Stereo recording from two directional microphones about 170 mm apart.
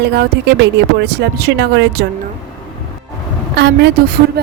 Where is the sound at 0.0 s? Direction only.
75° right (ahead or behind); by 2.0 s 90° right.